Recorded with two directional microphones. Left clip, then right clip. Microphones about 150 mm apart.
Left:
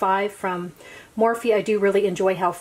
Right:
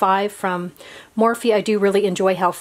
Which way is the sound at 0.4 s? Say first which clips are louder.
Right 4 dB; 40° right (ahead or behind).